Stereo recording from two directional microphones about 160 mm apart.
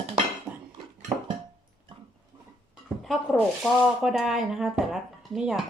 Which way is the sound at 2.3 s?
30° right (ahead or behind).